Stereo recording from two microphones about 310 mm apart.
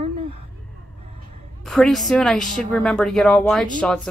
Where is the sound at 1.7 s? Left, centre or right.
Centre.